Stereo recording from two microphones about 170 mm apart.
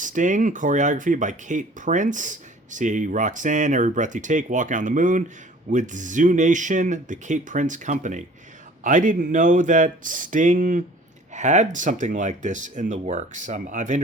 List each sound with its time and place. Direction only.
0.0 s speech: 50° right (ahead or behind)